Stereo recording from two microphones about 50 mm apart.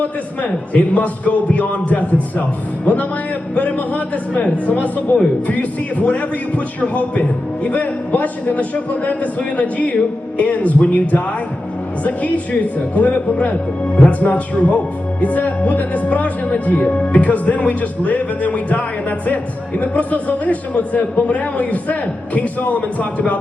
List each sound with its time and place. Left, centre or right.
0.0 s a man's voice: left